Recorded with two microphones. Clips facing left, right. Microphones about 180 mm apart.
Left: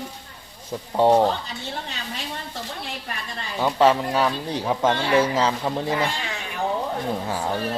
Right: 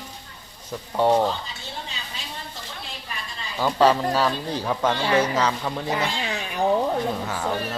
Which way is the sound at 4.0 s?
15° left (ahead or behind).